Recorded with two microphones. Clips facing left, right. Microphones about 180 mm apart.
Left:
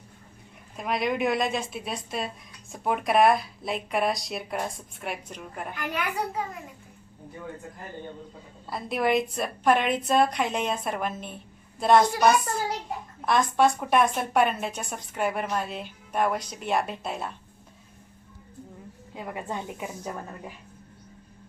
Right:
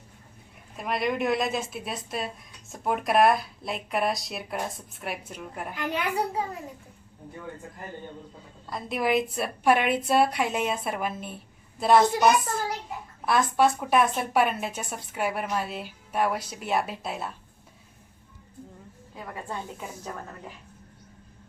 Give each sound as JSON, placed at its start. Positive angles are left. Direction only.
{"t": 0.8, "sound": "a woman's voice", "side_deg": 0}
{"t": 5.7, "sound": "a child's voice", "side_deg": -20}
{"t": 8.7, "sound": "a woman's voice", "side_deg": 0}
{"t": 13.2, "sound": "a woman's voice", "side_deg": -5}
{"t": 19.1, "sound": "a woman's voice", "side_deg": 20}